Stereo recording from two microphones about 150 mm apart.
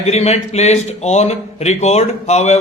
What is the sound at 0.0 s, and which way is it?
Speech, 45° left (ahead or behind).